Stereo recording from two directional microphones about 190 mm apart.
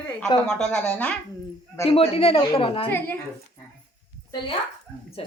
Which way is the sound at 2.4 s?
20° left (ahead or behind).